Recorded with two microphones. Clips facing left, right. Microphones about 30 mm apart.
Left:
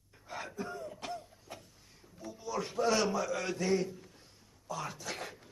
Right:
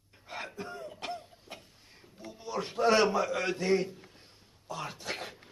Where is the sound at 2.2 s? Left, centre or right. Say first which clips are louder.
Right 1 dB; right.